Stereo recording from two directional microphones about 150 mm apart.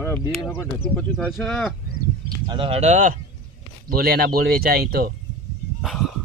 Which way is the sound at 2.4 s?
35° right (ahead or behind).